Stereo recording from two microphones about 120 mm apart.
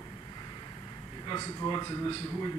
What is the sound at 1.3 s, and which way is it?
Speech, 35° left (ahead or behind).